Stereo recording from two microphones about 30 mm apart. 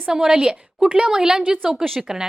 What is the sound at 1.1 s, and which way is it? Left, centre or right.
A woman's voice, right.